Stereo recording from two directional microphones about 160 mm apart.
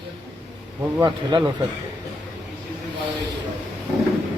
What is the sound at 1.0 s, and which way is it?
Speech, 25° right (ahead or behind).